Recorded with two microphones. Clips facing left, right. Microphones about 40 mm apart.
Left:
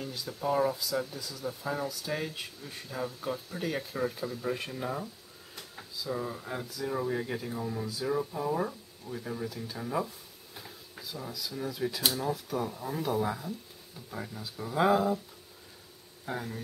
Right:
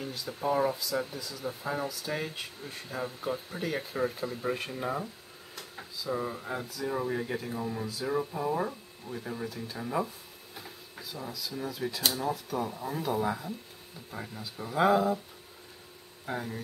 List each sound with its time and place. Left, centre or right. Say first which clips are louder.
0.5 s speech: even; centre
1.9 s speech: even; centre
16.3 s speech: right 1 dB; centre